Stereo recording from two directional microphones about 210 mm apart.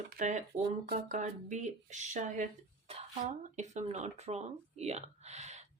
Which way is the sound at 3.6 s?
35° right (ahead or behind).